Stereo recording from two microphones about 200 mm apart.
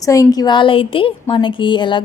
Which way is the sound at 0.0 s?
15° left (ahead or behind).